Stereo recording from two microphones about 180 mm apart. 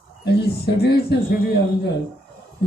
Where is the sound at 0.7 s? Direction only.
65° left (ahead or behind).